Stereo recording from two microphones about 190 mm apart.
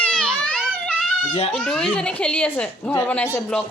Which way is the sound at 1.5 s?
5° left (ahead or behind).